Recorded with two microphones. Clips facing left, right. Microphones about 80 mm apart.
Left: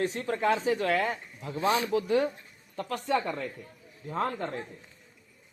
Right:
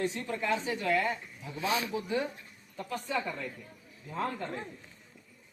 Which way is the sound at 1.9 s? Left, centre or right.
Left.